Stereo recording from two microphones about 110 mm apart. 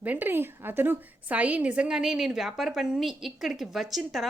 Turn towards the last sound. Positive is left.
turn(degrees=0)  # may be behind; listen again after turning